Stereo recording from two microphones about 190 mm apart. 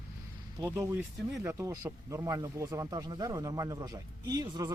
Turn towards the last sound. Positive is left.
turn(degrees=-20)  # may be behind; listen again after turning